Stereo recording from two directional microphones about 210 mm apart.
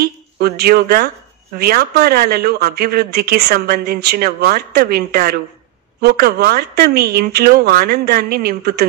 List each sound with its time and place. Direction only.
0.0 s speech: 50° right (ahead or behind)